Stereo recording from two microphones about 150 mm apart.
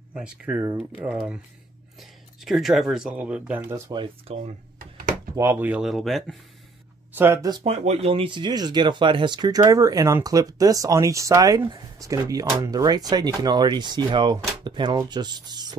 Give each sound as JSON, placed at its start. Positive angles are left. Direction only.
{"t": 0.1, "sound": "speech", "side_deg": -5}
{"t": 0.6, "sound": "speech", "side_deg": -15}
{"t": 3.9, "sound": "speech", "side_deg": -30}
{"t": 4.7, "sound": "a sound", "side_deg": -70}
{"t": 5.3, "sound": "speech", "side_deg": -15}
{"t": 7.6, "sound": "speech", "side_deg": -45}